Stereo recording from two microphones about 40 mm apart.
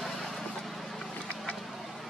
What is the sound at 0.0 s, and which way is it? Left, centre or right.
Vehicle, centre.